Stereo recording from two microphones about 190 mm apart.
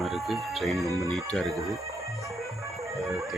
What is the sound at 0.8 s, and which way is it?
Speech, 15° right (ahead or behind).